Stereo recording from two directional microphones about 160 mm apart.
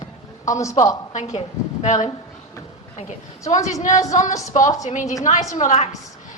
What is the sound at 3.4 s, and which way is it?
A woman's voice, 45° left (ahead or behind).